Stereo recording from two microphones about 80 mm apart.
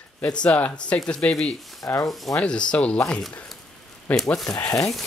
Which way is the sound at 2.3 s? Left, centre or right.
Centre.